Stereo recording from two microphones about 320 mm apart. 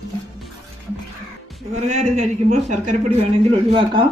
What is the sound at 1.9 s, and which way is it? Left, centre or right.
Speech, right.